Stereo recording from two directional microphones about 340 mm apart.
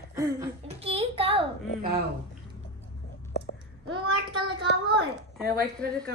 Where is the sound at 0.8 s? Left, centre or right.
Centre.